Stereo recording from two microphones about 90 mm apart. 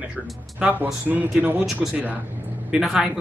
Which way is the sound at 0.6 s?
15° right (ahead or behind).